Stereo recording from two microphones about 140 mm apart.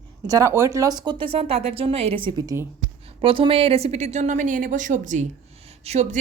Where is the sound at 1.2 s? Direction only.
40° right (ahead or behind).